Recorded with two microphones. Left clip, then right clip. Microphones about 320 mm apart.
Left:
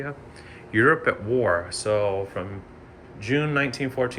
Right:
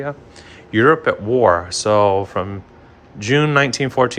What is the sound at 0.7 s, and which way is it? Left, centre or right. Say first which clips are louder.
Speech: right 6 dB; centre.